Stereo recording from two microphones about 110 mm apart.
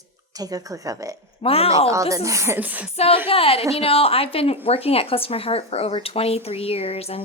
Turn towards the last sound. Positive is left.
turn(degrees=65)  # may be behind; listen again after turning